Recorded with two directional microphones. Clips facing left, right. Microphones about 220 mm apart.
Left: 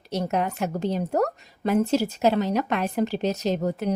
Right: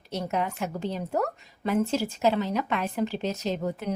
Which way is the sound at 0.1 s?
40° left (ahead or behind).